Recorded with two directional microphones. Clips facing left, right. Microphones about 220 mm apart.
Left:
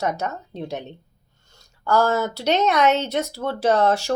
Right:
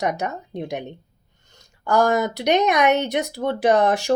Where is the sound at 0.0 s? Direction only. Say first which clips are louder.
Right 1 dB; 15° right (ahead or behind).